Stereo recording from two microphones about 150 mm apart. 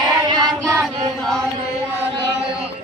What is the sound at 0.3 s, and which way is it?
Child singing, 30° right (ahead or behind).